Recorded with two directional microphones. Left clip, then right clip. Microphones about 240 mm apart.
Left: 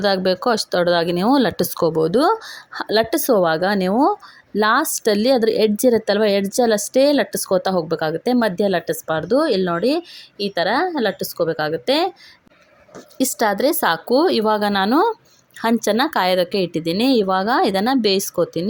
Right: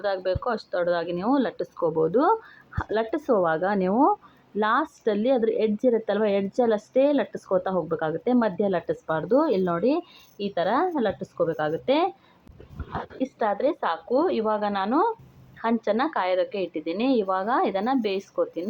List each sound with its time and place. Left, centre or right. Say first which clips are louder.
0.0 s speech: left 8 dB; left
13.1 s speech: left 8 dB; left